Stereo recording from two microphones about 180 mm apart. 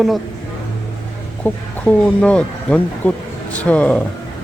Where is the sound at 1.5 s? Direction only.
10° left (ahead or behind).